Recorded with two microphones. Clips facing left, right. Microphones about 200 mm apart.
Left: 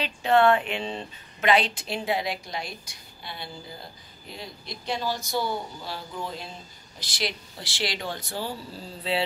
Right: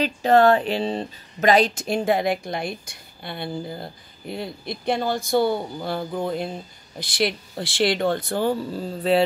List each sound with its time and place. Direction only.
0.0 s speech: 40° right (ahead or behind)